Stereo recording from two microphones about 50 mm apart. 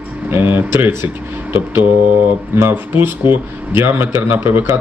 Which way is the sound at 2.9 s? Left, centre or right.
Right.